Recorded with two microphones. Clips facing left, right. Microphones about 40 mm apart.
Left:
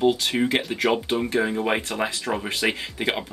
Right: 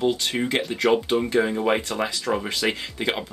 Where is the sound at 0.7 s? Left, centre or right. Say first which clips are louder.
Right 2 dB; centre.